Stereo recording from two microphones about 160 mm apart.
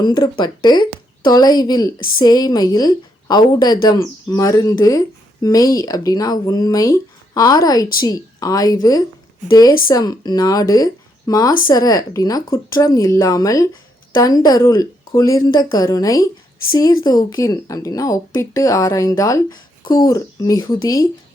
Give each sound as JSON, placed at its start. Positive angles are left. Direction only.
{"t": 0.0, "sound": "a woman's voice", "side_deg": 25}